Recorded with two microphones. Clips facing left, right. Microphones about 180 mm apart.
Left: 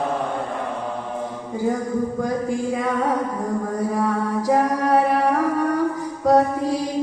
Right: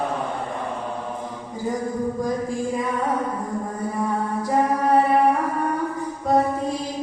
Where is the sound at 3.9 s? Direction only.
75° left (ahead or behind).